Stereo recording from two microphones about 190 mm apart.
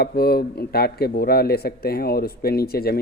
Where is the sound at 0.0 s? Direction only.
55° left (ahead or behind).